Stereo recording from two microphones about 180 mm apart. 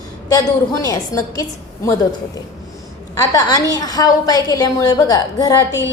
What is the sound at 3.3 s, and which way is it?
A woman's voice, 20° left (ahead or behind).